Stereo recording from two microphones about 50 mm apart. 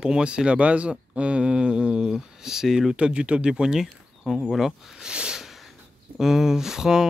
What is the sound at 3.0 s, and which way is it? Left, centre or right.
Speech, right.